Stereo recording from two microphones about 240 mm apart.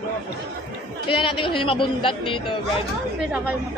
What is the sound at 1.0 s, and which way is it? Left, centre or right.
Speech, left.